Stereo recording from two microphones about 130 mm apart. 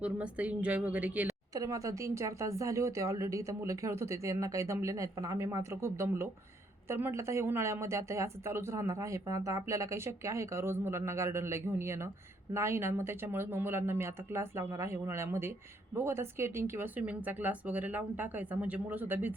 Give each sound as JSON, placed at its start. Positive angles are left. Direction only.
{"t": 0.0, "sound": "speech", "side_deg": -10}
{"t": 1.5, "sound": "speech", "side_deg": -25}